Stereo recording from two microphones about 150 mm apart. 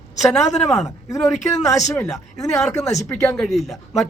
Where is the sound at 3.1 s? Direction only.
Centre (ahead or behind).